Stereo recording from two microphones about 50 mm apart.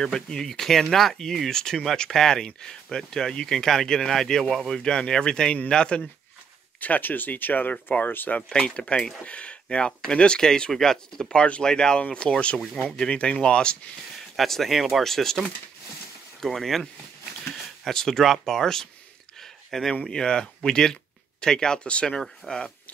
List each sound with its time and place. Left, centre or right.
0.0 s speech: centre
6.8 s speech: left
7.7 s speech: left
8.1 s speech: left
8.4 s speech: left
14.3 s speech: centre
19.3 s a sound: centre
20.1 s speech: centre
22.4 s speech: centre